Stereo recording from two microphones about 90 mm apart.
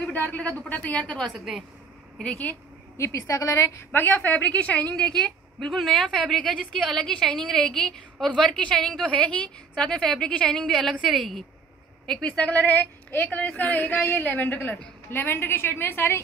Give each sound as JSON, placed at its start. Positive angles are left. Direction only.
{"t": 0.0, "sound": "a woman's voice", "side_deg": 20}
{"t": 1.2, "sound": "a woman's voice", "side_deg": -5}
{"t": 2.2, "sound": "a woman's voice", "side_deg": 15}
{"t": 3.0, "sound": "a woman's voice", "side_deg": 35}